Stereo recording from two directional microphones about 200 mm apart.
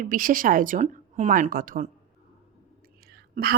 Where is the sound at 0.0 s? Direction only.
45° right (ahead or behind).